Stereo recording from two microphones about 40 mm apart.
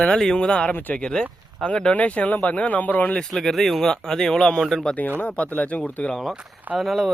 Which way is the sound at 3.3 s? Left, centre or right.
Centre.